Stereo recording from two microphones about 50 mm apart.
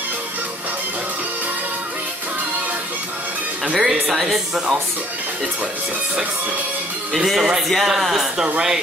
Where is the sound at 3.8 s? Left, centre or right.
Centre.